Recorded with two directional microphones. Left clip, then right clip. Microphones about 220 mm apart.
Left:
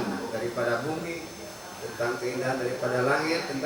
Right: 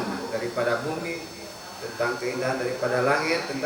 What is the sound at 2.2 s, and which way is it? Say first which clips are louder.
Speech: right 2 dB; 5° left (ahead or behind).